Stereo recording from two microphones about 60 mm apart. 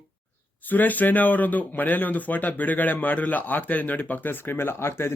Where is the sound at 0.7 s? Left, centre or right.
Left.